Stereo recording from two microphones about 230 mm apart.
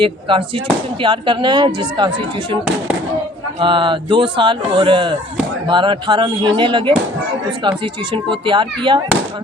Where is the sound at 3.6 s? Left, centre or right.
Right.